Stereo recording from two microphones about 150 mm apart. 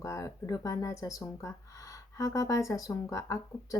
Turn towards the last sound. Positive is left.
turn(degrees=20)  # may be behind; listen again after turning